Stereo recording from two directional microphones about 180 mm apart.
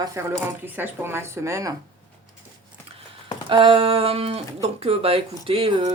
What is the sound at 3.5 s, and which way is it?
Speech, 30° right (ahead or behind).